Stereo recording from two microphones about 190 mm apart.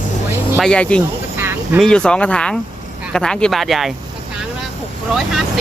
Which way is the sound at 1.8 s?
5° left (ahead or behind).